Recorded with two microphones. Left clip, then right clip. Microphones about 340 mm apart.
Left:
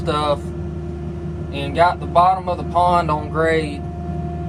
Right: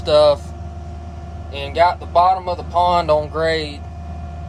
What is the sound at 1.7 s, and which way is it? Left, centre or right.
Speech, right.